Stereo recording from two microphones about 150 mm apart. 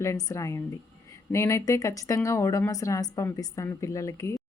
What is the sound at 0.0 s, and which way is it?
A woman's voice, 20° left (ahead or behind).